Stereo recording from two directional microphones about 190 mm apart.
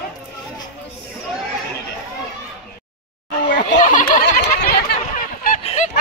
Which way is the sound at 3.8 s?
45° left (ahead or behind).